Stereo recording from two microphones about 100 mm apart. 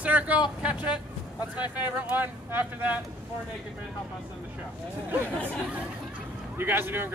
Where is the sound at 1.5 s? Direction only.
45° left (ahead or behind).